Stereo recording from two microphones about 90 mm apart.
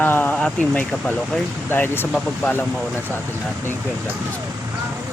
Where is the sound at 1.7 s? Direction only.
25° left (ahead or behind).